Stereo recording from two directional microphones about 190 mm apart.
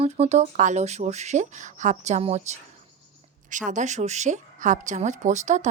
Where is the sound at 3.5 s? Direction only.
40° right (ahead or behind).